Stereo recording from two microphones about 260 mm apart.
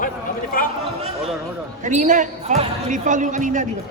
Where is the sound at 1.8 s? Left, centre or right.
Right.